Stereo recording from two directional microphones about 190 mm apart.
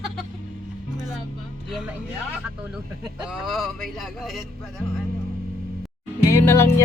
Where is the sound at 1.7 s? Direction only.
Centre (ahead or behind).